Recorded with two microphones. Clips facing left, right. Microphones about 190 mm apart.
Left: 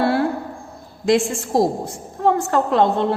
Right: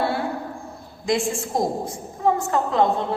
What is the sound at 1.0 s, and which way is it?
A woman's voice, 75° left (ahead or behind).